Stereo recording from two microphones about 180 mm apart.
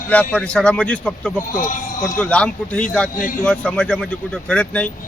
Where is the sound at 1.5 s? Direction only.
45° left (ahead or behind).